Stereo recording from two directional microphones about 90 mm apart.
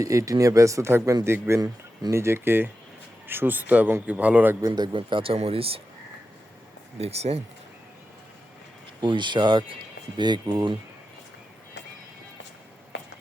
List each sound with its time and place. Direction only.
0.0 s a man's voice: 35° right (ahead or behind); by 4.5 s 15° right (ahead or behind)
4.6 s speech: 50° right (ahead or behind)
4.9 s speech: 70° right (ahead or behind); by 5.8 s 90° right
9.0 s speech: 60° right (ahead or behind)